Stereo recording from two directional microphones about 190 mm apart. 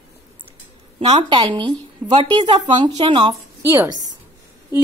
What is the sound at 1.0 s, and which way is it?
Speech, 35° right (ahead or behind).